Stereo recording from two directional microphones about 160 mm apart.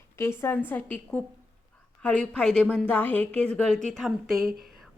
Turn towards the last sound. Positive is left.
turn(degrees=0)  # may be behind; listen again after turning